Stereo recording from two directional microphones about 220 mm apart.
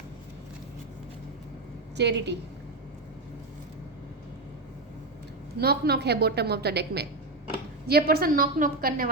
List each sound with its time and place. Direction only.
2.0 s a woman's voice: 50° right (ahead or behind)
5.5 s a woman's voice: 45° right (ahead or behind)